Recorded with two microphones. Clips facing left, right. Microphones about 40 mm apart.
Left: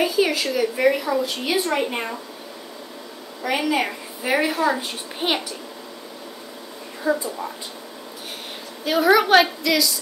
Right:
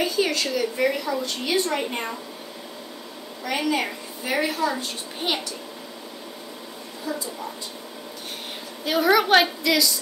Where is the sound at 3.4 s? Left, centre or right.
Centre.